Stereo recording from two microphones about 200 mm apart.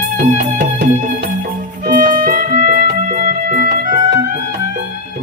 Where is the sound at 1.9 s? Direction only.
40° right (ahead or behind).